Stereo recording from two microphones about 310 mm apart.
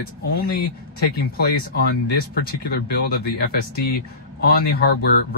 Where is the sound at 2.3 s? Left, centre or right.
Left.